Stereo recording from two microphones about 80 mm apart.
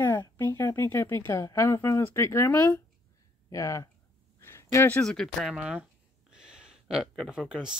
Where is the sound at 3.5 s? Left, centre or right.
Left.